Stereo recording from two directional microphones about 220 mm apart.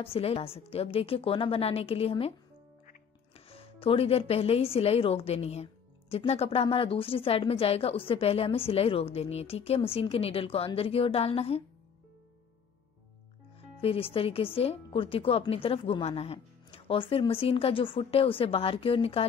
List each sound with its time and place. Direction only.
0.0 s speech: 25° left (ahead or behind)
13.6 s speech: 25° left (ahead or behind)